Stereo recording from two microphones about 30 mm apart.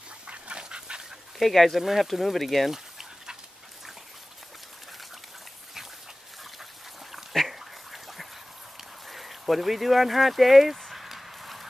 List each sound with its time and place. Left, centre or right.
0.6 s dog: right
1.5 s speech: centre
1.8 s speech: centre
2.7 s dog: centre
6.6 s a sound: centre
7.4 s duck: centre
9.0 s speech: centre
10.9 s a sound: centre